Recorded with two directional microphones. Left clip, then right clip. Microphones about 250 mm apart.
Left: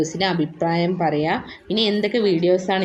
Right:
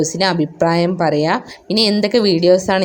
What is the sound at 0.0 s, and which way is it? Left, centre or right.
A woman's voice, right.